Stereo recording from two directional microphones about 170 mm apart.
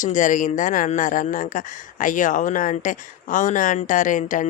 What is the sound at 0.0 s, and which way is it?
Speech, 50° left (ahead or behind).